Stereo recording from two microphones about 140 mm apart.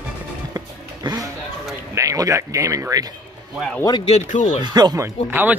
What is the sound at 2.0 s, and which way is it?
Speech, 25° right (ahead or behind).